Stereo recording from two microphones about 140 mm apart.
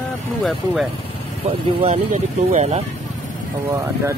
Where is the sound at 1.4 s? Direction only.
50° right (ahead or behind).